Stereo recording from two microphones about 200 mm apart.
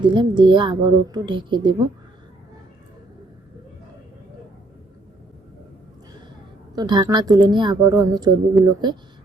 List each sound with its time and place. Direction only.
0.0 s a woman's voice: 25° right (ahead or behind)
6.7 s a woman's voice: 20° right (ahead or behind)